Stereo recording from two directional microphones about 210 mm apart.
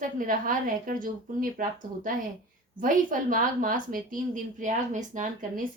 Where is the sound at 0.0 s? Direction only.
40° right (ahead or behind).